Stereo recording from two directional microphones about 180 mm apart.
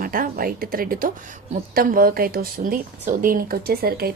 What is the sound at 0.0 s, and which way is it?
Speech, 50° right (ahead or behind).